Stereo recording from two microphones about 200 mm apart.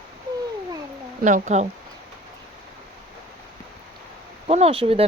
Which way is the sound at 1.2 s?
35° right (ahead or behind).